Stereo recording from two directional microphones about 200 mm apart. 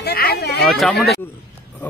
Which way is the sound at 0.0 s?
50° left (ahead or behind).